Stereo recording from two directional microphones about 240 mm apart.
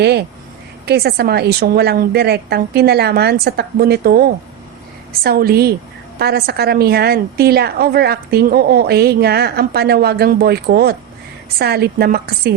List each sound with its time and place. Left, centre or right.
0.0 s a woman's voice: right